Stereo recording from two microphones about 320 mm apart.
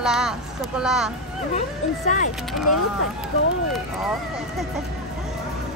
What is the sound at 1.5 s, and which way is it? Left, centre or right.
Speech, left.